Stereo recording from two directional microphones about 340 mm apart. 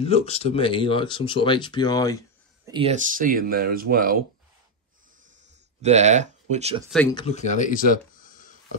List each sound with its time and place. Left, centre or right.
0.0 s speech: centre
2.6 s speech: centre
5.8 s speech: centre
6.9 s speech: centre; by 8.5 s left